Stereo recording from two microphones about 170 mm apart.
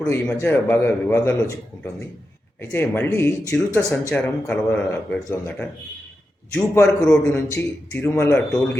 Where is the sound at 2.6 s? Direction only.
10° left (ahead or behind).